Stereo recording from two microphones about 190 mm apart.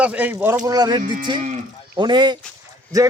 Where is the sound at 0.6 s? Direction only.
20° right (ahead or behind).